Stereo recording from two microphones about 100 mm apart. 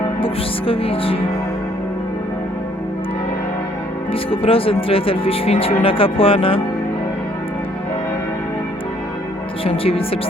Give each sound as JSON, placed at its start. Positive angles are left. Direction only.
{"t": 0.7, "sound": "speech", "side_deg": 70}
{"t": 4.1, "sound": "speech", "side_deg": 70}
{"t": 9.6, "sound": "speech", "side_deg": 70}